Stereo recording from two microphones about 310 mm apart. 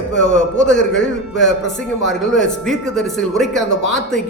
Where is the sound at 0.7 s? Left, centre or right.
Left.